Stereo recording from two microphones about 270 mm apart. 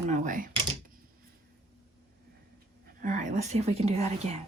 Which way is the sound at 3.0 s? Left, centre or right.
Right.